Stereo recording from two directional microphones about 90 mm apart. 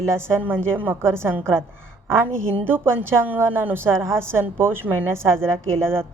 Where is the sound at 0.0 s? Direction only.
30° right (ahead or behind).